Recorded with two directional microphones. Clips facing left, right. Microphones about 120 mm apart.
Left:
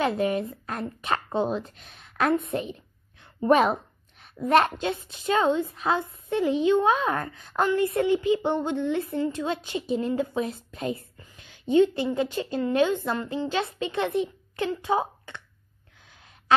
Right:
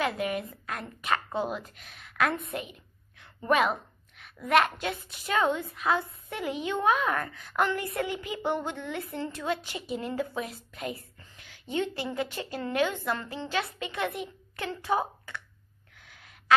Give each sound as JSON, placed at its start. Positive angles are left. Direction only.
{"t": 0.0, "sound": "a woman's voice", "side_deg": 30}